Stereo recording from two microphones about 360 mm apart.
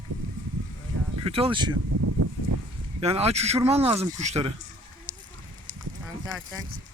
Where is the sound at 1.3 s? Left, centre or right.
Centre.